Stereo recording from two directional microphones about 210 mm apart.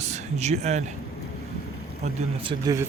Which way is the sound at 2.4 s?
25° right (ahead or behind).